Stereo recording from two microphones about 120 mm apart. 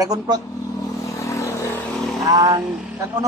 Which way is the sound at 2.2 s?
30° right (ahead or behind).